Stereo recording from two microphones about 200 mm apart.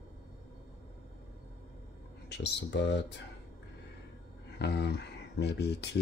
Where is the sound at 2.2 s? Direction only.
60° left (ahead or behind).